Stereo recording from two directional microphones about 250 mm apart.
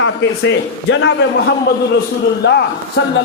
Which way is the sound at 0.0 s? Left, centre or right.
Left.